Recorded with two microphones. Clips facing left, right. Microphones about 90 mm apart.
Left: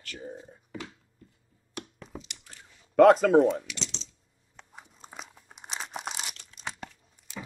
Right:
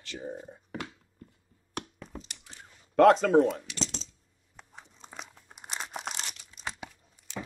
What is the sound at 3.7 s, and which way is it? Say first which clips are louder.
Typing: right 4 dB; 45° right (ahead or behind).